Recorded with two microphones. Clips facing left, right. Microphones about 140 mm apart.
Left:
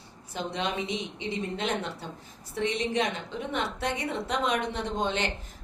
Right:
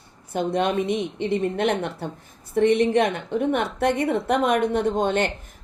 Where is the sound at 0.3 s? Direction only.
50° right (ahead or behind).